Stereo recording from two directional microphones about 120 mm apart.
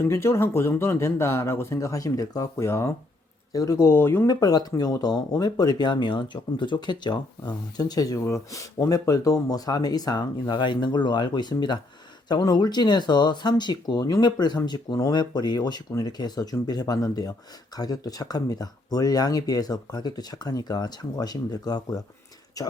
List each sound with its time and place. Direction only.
0.0 s speech: 20° left (ahead or behind)
4.3 s speech: 35° left (ahead or behind)